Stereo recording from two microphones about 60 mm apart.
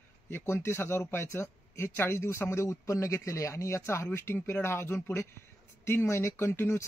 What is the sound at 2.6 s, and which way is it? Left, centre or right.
A man's voice, left.